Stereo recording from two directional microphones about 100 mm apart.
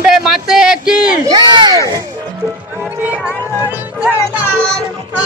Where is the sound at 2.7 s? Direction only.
15° right (ahead or behind).